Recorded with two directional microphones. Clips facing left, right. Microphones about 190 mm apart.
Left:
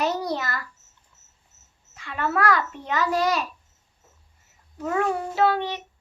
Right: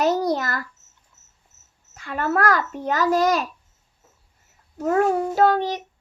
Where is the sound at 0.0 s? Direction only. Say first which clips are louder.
Right 5 dB; 45° right (ahead or behind).